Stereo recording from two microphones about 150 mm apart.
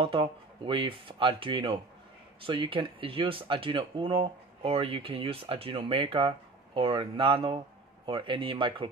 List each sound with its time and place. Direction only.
0.0 s speech: 35° right (ahead or behind)